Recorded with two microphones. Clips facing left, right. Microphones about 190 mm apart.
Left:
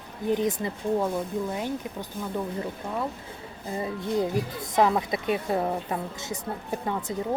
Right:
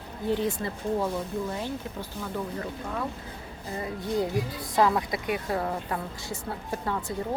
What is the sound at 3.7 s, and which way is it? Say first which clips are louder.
Speech: left 2 dB; 25° left (ahead or behind).